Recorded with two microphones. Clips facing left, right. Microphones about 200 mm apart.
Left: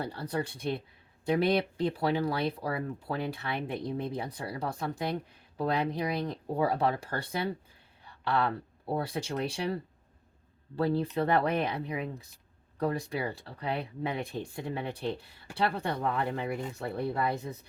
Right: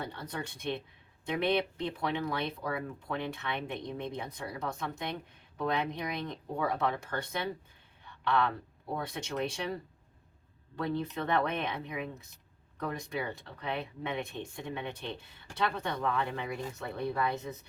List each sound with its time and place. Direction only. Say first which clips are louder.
0.0 s speech: left 6 dB; 35° left (ahead or behind)
10.8 s speech: left 5 dB; 30° left (ahead or behind)